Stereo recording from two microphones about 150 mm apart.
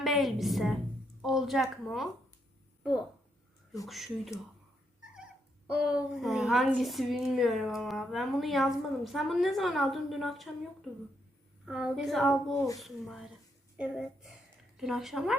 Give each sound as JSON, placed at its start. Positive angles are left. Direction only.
{"t": 0.0, "sound": "a woman's voice", "side_deg": 0}
{"t": 3.8, "sound": "a woman's voice", "side_deg": 0}
{"t": 5.7, "sound": "a woman's voice", "side_deg": -5}
{"t": 11.6, "sound": "a woman's voice", "side_deg": -5}
{"t": 12.5, "sound": "a child's voice", "side_deg": 20}
{"t": 12.8, "sound": "a woman's voice", "side_deg": 0}